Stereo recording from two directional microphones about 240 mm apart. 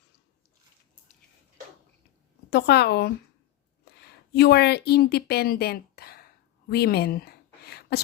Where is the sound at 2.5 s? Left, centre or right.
Left.